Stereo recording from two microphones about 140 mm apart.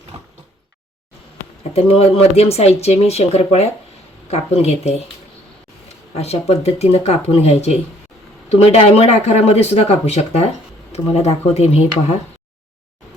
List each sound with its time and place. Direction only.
1.7 s speech: 45° left (ahead or behind)
6.1 s speech: 50° left (ahead or behind)